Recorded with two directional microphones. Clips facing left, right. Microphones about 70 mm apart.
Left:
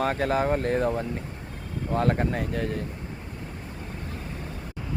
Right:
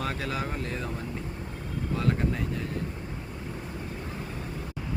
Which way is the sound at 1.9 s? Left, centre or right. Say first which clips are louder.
Left 4 dB; left.